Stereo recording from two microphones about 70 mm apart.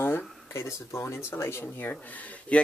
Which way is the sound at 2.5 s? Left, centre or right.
Centre.